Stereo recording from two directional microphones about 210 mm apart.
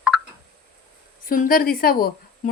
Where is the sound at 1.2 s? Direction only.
40° left (ahead or behind).